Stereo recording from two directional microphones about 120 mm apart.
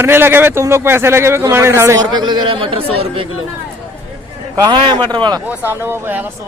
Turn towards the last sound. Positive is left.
turn(degrees=-15)  # may be behind; listen again after turning